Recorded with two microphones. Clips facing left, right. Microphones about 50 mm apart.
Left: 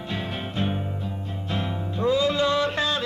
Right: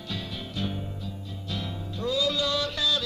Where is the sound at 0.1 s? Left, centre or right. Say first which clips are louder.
Left 5 dB; left.